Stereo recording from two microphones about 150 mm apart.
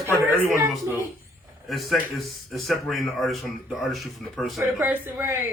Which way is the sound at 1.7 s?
Centre (ahead or behind).